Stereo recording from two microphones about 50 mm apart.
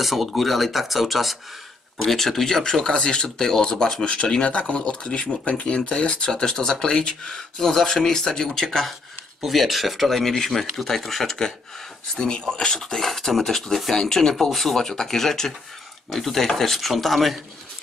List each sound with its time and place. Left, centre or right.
0.0 s speech: centre